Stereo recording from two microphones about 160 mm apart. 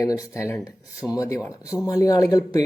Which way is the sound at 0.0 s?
20° left (ahead or behind).